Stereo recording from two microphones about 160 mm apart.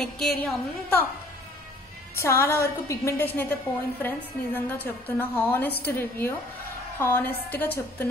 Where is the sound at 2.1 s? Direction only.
15° left (ahead or behind).